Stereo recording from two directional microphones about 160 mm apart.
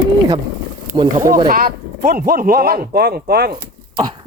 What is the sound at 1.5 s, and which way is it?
Speech, 65° right (ahead or behind).